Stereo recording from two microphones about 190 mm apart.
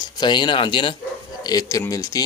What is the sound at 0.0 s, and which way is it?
Speech, 25° left (ahead or behind).